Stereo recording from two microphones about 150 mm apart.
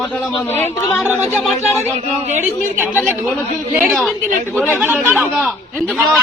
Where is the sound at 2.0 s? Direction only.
50° right (ahead or behind).